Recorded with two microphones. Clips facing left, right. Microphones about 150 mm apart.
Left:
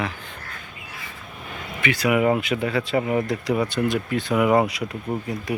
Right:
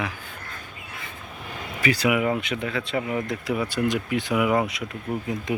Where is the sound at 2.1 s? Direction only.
50° left (ahead or behind).